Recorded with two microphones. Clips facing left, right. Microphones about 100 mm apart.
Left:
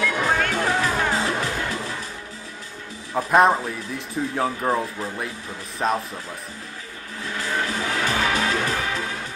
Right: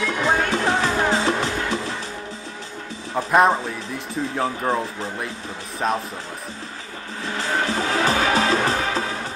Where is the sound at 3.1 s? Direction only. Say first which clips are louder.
Even; centre (ahead or behind).